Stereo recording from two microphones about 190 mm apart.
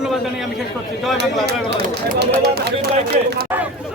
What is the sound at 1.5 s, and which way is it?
Speech, 55° right (ahead or behind).